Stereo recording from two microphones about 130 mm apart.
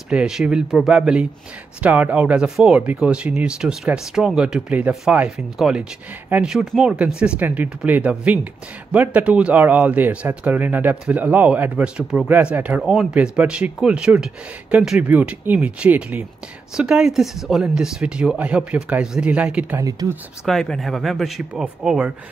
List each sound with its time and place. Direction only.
0.1 s speech: 5° right (ahead or behind)
19.8 s speech: 25° right (ahead or behind)
20.4 s speech: centre (ahead or behind)